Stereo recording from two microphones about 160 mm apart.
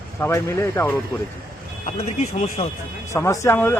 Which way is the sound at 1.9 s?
45° left (ahead or behind).